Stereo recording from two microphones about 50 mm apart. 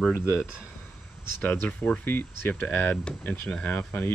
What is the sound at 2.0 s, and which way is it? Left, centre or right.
Speech, left.